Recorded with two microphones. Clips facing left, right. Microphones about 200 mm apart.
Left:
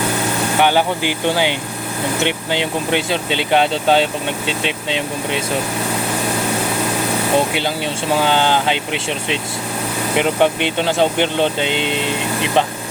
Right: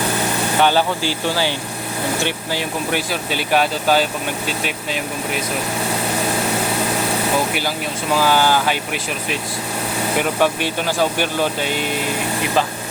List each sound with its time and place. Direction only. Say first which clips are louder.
0.6 s speech: left 1 dB; 15° left (ahead or behind)
7.3 s speech: left 3 dB; 25° left (ahead or behind)